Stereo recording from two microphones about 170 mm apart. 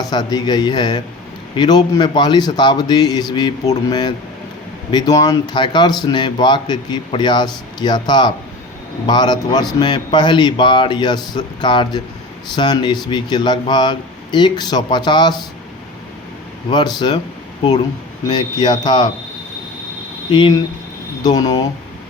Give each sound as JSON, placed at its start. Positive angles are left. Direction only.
{"t": 0.0, "sound": "speech", "side_deg": 25}
{"t": 16.6, "sound": "speech", "side_deg": 25}
{"t": 18.3, "sound": "speech", "side_deg": 25}
{"t": 21.2, "sound": "speech", "side_deg": 25}